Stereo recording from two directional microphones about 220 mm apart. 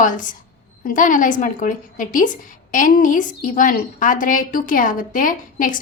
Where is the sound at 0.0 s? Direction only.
35° left (ahead or behind).